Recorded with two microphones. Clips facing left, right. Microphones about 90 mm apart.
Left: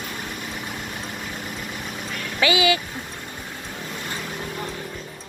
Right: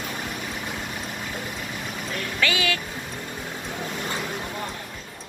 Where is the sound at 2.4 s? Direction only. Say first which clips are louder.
Left 6 dB; 5° left (ahead or behind).